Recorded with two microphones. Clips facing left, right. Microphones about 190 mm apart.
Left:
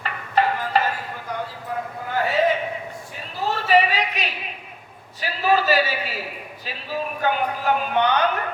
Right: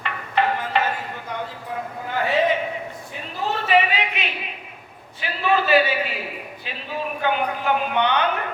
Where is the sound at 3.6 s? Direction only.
40° left (ahead or behind).